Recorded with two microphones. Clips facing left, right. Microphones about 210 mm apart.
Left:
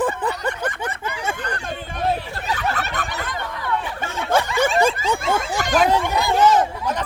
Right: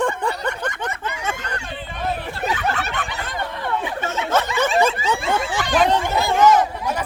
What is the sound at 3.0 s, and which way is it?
Fowl, 40° left (ahead or behind).